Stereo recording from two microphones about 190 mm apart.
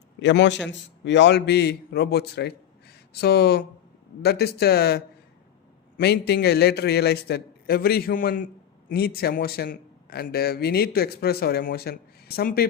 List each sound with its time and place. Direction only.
0.2 s speech: 70° left (ahead or behind); by 12.6 s 55° left (ahead or behind)